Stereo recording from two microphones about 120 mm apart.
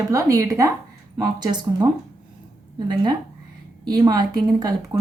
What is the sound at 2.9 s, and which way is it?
A woman's voice, 35° right (ahead or behind).